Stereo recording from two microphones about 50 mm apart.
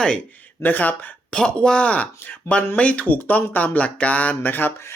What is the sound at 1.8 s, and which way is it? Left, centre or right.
Speech, left.